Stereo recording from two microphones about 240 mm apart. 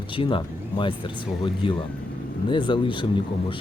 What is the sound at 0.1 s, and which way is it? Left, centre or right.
Speech, left.